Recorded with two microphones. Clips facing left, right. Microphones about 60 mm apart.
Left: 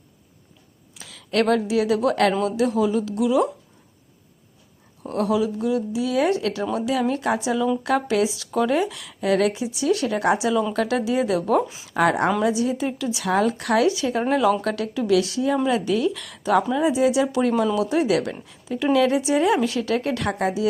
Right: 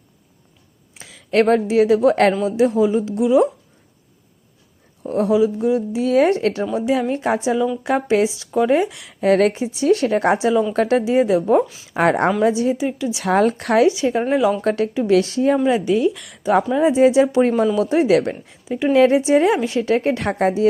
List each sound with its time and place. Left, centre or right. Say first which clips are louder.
0.9 s a woman's voice: right 5 dB; right
5.0 s speech: right 5 dB; right
5.9 s speech: right 7 dB; right
9.2 s speech: right 5 dB; right
11.9 s speech: right 3 dB; right
12.7 s a woman's voice: right 3 dB; centre
13.2 s speech: right 4 dB; right; by 14.5 s centre
14.6 s speech: right 6 dB; right
15.5 s speech: right 4 dB; right
16.7 s speech: right 6 dB; right